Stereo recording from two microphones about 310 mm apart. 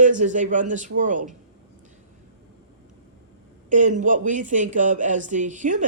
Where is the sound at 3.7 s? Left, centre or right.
Right.